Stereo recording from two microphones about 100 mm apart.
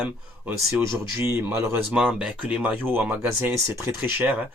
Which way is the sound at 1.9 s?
10° right (ahead or behind).